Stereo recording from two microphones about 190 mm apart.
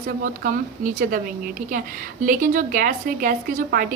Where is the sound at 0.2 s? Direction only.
45° right (ahead or behind).